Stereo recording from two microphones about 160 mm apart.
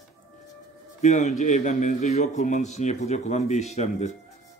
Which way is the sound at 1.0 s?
50° left (ahead or behind).